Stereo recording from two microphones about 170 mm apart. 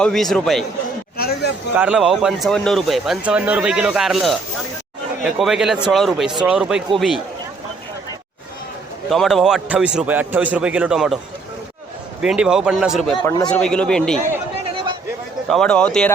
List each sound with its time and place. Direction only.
0.0 s speech: centre (ahead or behind)
1.1 s a sound: 65° left (ahead or behind)
1.7 s speech: 5° right (ahead or behind)
9.0 s speech: centre (ahead or behind)
12.2 s speech: 5° right (ahead or behind)
15.4 s speech: 5° left (ahead or behind)